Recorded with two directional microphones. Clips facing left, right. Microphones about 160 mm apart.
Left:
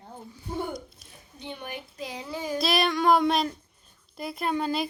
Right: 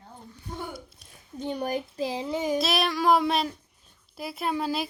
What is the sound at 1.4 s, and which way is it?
Speech, 40° right (ahead or behind).